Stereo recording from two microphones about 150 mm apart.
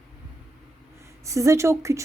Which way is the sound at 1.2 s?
20° right (ahead or behind).